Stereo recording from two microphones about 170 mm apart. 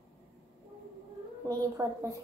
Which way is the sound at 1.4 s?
20° right (ahead or behind).